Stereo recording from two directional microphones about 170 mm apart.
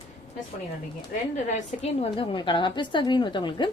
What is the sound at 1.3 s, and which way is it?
A woman's voice, 40° left (ahead or behind).